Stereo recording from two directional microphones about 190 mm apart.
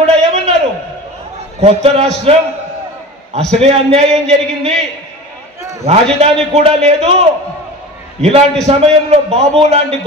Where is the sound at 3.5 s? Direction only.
30° right (ahead or behind).